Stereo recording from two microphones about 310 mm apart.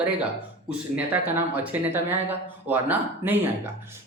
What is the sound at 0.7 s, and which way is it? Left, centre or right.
Speech, centre.